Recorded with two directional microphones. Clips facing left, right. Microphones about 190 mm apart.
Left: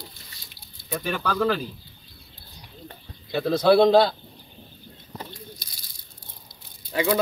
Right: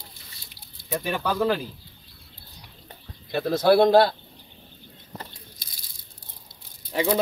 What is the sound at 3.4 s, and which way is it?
Speech, 5° right (ahead or behind).